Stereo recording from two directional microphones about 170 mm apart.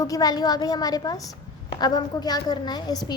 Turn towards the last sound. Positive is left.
turn(degrees=25)  # may be behind; listen again after turning